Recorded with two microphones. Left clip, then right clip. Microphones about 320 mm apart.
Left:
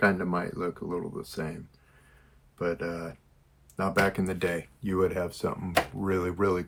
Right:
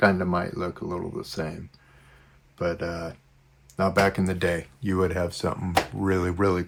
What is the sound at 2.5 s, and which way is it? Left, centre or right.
Speech, right.